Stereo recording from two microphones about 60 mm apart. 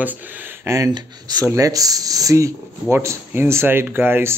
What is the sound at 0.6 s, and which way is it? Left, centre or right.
Speech, right.